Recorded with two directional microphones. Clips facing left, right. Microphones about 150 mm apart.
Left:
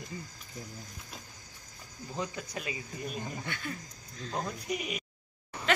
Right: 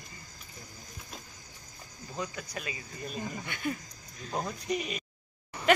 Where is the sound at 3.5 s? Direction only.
15° right (ahead or behind).